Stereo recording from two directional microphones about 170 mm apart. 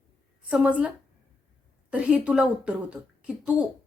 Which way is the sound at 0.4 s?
10° right (ahead or behind).